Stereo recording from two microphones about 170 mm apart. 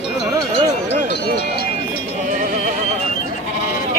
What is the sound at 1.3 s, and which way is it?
Run, 70° left (ahead or behind).